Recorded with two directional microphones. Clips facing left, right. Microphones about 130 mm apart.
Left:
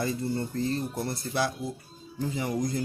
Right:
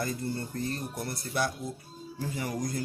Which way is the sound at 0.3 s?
25° left (ahead or behind).